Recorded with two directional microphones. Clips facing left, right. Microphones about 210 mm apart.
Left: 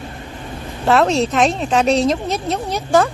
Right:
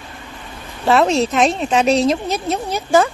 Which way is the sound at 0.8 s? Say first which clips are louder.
Even; centre (ahead or behind).